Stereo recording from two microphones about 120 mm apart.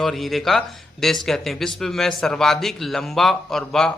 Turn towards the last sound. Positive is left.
turn(degrees=5)  # may be behind; listen again after turning